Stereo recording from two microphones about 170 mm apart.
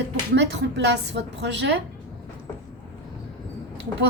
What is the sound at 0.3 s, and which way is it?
A woman's voice, 90° right.